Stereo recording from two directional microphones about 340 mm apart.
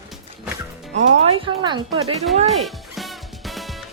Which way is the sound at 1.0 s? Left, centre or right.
Centre.